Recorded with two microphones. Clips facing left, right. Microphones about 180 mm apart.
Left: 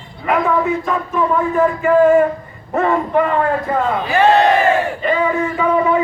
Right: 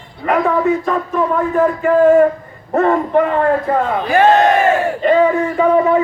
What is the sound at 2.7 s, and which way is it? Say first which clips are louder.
A man's voice: right 3 dB; 40° right (ahead or behind).